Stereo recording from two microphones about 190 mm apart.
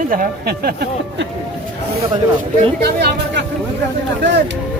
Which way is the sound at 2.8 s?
60° right (ahead or behind).